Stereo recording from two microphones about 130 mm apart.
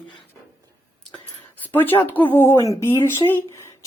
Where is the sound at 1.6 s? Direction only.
15° left (ahead or behind).